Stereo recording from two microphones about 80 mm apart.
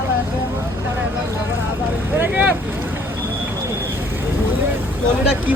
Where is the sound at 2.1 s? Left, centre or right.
Right.